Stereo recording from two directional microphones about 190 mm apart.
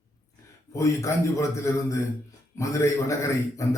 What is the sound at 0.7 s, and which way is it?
A man's voice, 15° left (ahead or behind).